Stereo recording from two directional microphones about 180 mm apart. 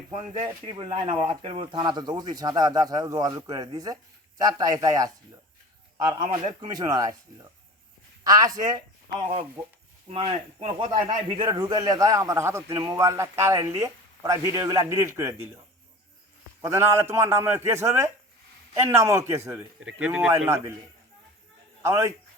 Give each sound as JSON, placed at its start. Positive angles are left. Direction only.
{"t": 0.3, "sound": "speech", "side_deg": -30}
{"t": 8.2, "sound": "a man's voice", "side_deg": -20}
{"t": 16.6, "sound": "a man's voice", "side_deg": -15}
{"t": 21.8, "sound": "a man's voice", "side_deg": -15}